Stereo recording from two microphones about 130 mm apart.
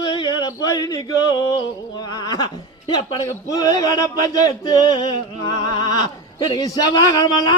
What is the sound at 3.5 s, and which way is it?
A man's voice, 30° left (ahead or behind).